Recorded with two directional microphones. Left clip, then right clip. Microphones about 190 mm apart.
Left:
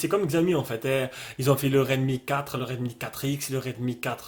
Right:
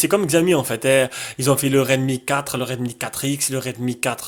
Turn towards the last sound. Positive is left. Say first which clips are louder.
# right 7 dB
turn(degrees=-35)  # may be behind; listen again after turning